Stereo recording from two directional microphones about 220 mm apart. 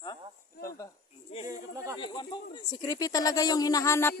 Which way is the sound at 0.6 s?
15° left (ahead or behind).